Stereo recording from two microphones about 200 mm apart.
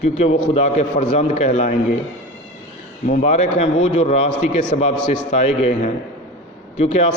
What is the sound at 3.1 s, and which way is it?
Speech, 35° left (ahead or behind).